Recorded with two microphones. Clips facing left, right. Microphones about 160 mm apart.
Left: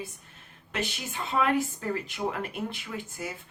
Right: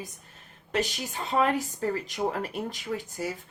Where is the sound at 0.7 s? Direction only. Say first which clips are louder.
Right 4 dB; 40° right (ahead or behind).